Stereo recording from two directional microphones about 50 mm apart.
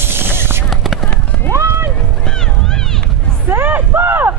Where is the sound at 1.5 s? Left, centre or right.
Right.